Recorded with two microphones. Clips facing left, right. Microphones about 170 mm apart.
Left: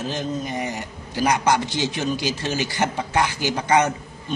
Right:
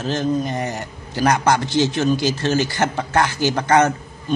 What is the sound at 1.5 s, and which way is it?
A man's voice, 15° left (ahead or behind).